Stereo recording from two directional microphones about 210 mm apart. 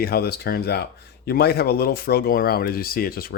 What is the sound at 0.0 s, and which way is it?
Speech, 50° left (ahead or behind).